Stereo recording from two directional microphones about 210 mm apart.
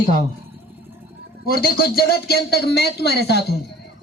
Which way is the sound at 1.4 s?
45° left (ahead or behind).